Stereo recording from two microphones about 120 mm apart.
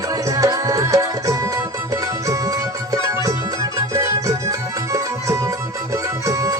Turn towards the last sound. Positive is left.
turn(degrees=-25)  # may be behind; listen again after turning